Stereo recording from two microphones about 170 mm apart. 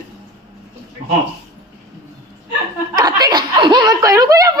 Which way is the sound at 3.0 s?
25° right (ahead or behind).